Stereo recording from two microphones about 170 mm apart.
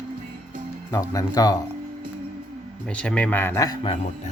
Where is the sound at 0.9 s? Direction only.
20° left (ahead or behind).